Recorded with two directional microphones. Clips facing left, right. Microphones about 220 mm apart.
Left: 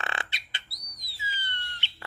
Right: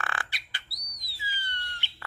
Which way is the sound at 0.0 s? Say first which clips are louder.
Left 1 dB; 25° left (ahead or behind).